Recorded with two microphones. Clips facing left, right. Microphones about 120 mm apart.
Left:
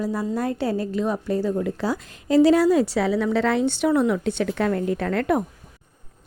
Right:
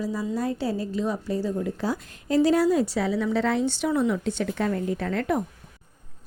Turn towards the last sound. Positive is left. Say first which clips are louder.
# left 4 dB
turn(degrees=60)  # may be behind; listen again after turning